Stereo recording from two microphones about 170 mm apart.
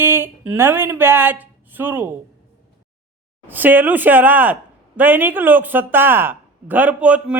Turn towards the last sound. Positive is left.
turn(degrees=-5)  # may be behind; listen again after turning